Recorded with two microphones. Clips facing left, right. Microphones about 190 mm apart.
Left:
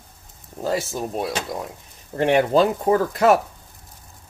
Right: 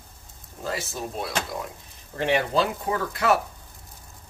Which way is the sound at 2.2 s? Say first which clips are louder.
Left 6 dB; 55° left (ahead or behind).